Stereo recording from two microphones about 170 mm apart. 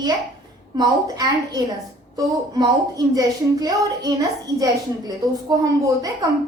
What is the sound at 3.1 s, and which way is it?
A woman's voice, 20° right (ahead or behind).